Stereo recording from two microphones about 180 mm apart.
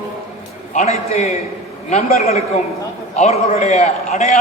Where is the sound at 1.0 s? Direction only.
35° left (ahead or behind).